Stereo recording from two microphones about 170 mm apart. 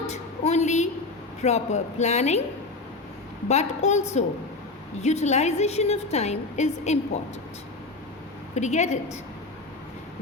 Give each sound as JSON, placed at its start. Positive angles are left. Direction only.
{"t": 0.1, "sound": "a sound", "side_deg": 40}
{"t": 1.4, "sound": "a woman's voice", "side_deg": 40}
{"t": 3.5, "sound": "a woman's voice", "side_deg": 40}
{"t": 8.5, "sound": "a woman's voice", "side_deg": 40}